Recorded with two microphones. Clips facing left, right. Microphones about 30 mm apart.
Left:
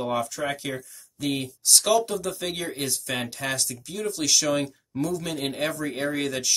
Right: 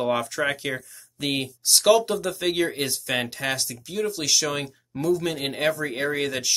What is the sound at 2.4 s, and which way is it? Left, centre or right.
Speech, right.